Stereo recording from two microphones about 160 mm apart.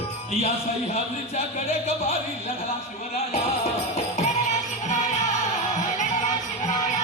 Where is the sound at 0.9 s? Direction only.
40° left (ahead or behind).